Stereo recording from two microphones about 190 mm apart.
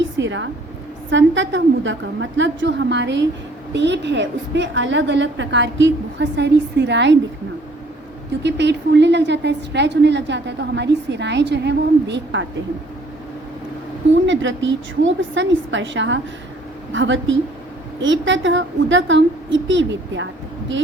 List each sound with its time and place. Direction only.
0.2 s a woman's voice: 80° right
8.4 s a woman's voice: 65° right (ahead or behind)
14.3 s a woman's voice: 80° right